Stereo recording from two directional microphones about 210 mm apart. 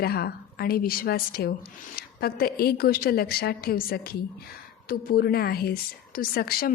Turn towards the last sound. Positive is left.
turn(degrees=45)  # may be behind; listen again after turning